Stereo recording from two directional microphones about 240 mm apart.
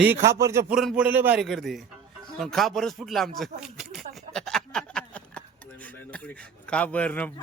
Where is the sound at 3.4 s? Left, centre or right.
Centre.